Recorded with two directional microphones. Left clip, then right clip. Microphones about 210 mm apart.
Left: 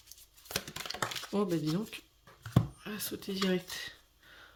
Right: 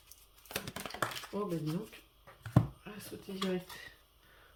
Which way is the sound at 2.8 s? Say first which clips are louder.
Left 7 dB; 50° left (ahead or behind).